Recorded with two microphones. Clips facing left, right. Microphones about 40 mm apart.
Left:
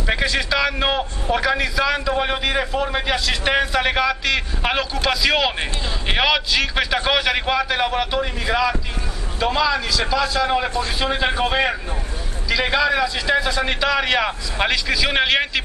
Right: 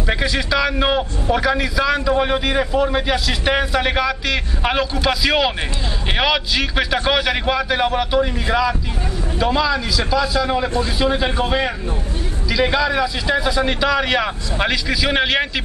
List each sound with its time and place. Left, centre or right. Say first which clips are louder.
0.0 s a man's voice: even; centre
10.4 s a man's voice: right 1 dB; centre